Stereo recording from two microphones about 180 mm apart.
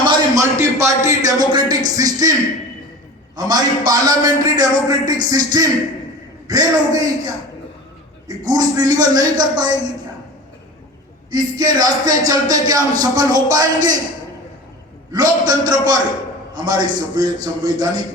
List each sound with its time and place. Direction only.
0.0 s a sound: 20° right (ahead or behind)
3.3 s speech: 20° right (ahead or behind)
8.4 s speech: 20° right (ahead or behind)
11.3 s speech: 20° right (ahead or behind)
15.1 s speech: 20° right (ahead or behind)